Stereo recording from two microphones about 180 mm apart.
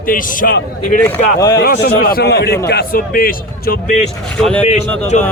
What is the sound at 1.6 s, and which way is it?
A man's voice, 55° left (ahead or behind).